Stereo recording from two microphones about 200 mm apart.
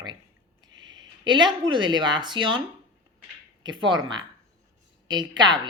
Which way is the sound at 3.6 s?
25° right (ahead or behind).